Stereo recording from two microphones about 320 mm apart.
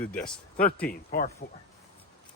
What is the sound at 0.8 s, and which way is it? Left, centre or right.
Speech, left.